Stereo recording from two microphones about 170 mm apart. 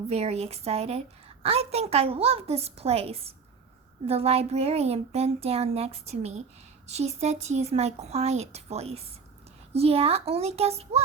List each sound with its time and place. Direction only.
0.1 s a woman's voice: 40° right (ahead or behind)